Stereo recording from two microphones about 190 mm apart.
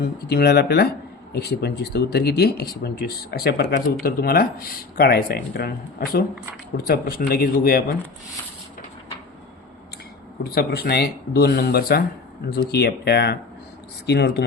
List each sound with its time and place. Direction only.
0.3 s speech: 55° left (ahead or behind)
10.5 s speech: 55° left (ahead or behind)